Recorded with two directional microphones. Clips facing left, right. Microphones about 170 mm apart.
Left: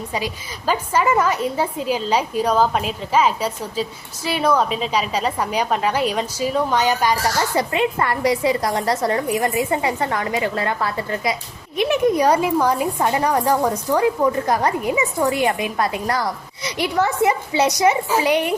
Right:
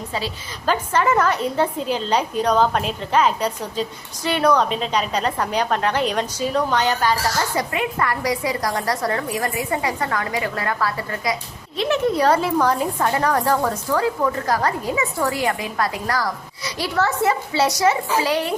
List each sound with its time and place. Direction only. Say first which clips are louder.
0.1 s a woman's voice: left 1 dB; 10° left (ahead or behind)
7.5 s a woman's voice: left 4 dB; 25° left (ahead or behind)